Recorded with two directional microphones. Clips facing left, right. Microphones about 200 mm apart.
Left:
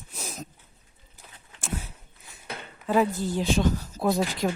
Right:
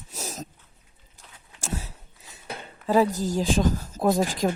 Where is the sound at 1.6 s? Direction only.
40° right (ahead or behind).